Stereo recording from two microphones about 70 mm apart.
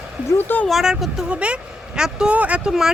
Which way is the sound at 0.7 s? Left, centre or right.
Centre.